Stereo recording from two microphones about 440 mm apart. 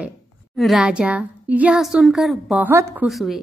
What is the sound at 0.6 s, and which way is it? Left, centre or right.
A woman's voice, centre.